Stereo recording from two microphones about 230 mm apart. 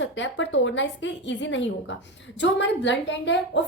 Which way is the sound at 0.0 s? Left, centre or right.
Left.